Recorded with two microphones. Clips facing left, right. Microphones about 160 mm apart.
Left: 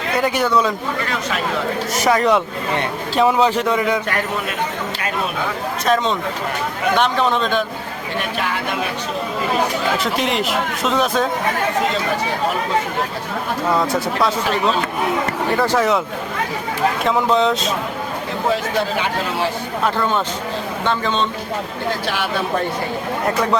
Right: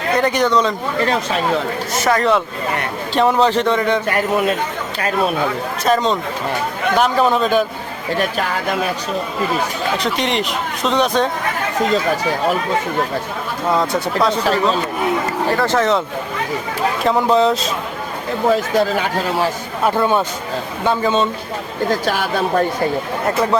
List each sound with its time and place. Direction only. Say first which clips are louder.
0.2 s speech: right 1 dB; 5° left (ahead or behind)
1.0 s speech: right 5 dB; 35° right (ahead or behind)
2.0 s speech: even; 10° left (ahead or behind)
5.8 s speech: right 2 dB; centre (ahead or behind)
10.0 s speech: right 1 dB; centre (ahead or behind)
13.7 s speech: right 3 dB; centre (ahead or behind)
14.4 s speech: right 2 dB; 40° right (ahead or behind)
15.5 s speech: even; 10° left (ahead or behind)
17.0 s speech: right 4 dB; centre (ahead or behind)
18.5 s speech: right 5 dB; 45° right (ahead or behind)
19.8 s a man's voice: right 4 dB; 10° right (ahead or behind)
21.8 s speech: right 4 dB; 45° right (ahead or behind)